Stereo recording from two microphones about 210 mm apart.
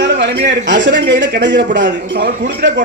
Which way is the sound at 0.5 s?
55° right (ahead or behind).